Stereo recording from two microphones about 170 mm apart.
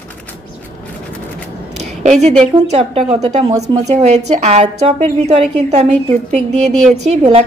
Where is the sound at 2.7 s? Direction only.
35° right (ahead or behind).